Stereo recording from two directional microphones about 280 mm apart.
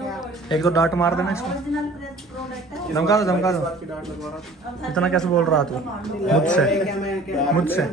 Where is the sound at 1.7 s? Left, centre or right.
Centre.